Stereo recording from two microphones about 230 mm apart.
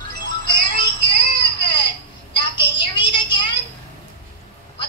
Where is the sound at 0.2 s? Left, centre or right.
Left.